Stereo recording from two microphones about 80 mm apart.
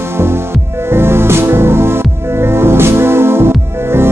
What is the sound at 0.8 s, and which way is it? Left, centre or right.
Music, right.